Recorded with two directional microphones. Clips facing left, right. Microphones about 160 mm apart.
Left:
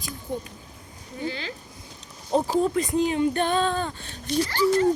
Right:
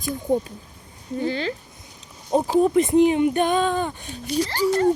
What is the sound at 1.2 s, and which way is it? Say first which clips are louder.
Speech: right 6 dB; 35° right (ahead or behind).